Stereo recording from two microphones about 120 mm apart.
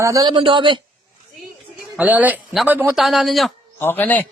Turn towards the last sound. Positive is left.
turn(degrees=15)  # may be behind; listen again after turning